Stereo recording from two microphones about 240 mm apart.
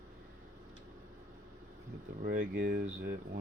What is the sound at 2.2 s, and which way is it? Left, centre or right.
Speech, right.